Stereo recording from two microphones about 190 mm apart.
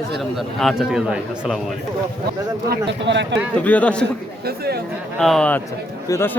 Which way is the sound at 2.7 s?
70° right (ahead or behind).